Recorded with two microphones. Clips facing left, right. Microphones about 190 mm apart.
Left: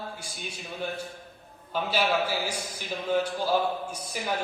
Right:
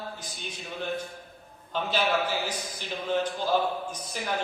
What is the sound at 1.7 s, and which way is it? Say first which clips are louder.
A man's voice: even; 10° left (ahead or behind).